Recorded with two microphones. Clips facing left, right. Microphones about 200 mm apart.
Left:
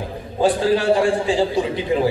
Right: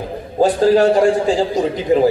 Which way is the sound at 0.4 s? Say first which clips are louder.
Right 5 dB; 40° right (ahead or behind).